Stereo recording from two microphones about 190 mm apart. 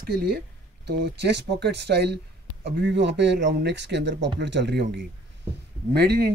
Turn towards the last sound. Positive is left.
turn(degrees=-60)  # may be behind; listen again after turning